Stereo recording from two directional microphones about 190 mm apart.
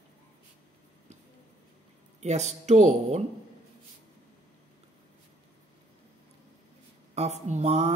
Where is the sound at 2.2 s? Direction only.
35° right (ahead or behind).